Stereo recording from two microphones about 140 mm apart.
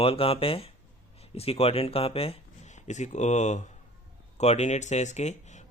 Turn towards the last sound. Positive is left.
turn(degrees=55)  # may be behind; listen again after turning